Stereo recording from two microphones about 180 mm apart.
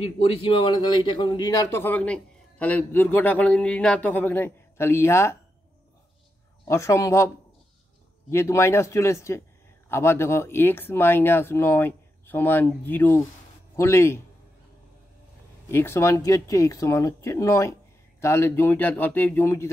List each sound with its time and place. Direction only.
0.0 s a man's voice: 30° left (ahead or behind); by 5.4 s 15° left (ahead or behind)
6.7 s speech: 15° left (ahead or behind)
8.3 s speech: 15° left (ahead or behind)
15.7 s speech: 15° left (ahead or behind)